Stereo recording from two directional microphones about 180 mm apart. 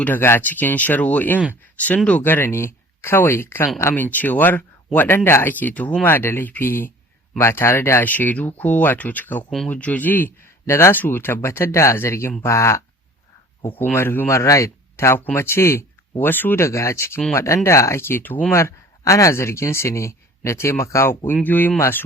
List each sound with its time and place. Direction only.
0.0 s speech: 10° left (ahead or behind)